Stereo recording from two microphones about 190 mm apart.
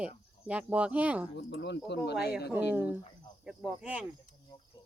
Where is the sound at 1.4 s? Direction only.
60° left (ahead or behind).